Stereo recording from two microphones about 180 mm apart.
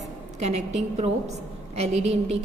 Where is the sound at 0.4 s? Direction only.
40° right (ahead or behind).